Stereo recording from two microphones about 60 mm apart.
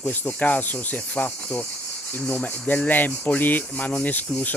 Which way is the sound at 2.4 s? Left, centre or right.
Left.